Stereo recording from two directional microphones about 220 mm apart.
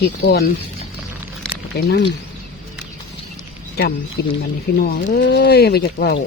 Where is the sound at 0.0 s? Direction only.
45° left (ahead or behind).